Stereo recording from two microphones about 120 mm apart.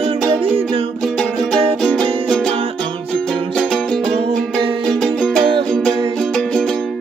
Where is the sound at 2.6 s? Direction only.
50° right (ahead or behind).